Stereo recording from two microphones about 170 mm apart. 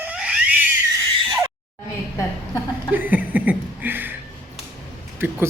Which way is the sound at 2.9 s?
10° right (ahead or behind).